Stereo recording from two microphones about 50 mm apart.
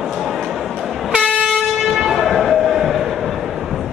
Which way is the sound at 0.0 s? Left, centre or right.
Centre.